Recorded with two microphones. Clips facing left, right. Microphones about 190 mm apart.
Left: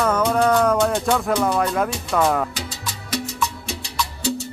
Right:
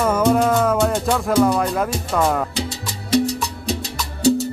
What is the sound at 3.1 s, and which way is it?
Music, 35° right (ahead or behind).